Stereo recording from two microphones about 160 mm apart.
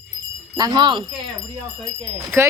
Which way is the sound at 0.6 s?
30° right (ahead or behind).